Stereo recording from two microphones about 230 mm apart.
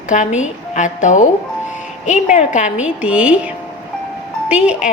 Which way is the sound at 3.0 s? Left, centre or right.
Centre.